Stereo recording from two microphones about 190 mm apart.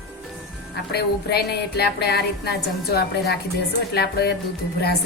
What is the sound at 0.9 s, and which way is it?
A woman's voice, 55° left (ahead or behind).